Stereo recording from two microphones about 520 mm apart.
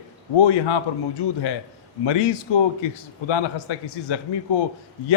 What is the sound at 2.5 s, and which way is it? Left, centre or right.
A man's voice, left.